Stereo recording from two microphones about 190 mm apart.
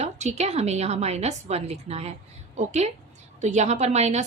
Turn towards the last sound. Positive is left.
turn(degrees=-35)  # may be behind; listen again after turning